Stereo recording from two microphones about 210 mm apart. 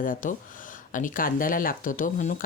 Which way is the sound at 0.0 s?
40° left (ahead or behind).